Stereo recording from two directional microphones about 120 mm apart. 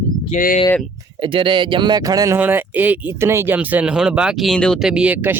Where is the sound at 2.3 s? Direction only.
15° right (ahead or behind); by 4.9 s 5° left (ahead or behind).